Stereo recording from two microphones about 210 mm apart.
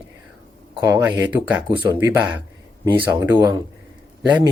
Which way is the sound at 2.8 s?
20° right (ahead or behind).